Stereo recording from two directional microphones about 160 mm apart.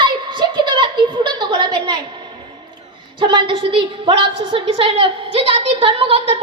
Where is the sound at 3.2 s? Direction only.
30° right (ahead or behind).